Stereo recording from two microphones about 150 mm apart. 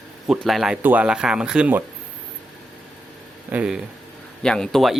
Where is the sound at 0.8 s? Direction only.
10° right (ahead or behind).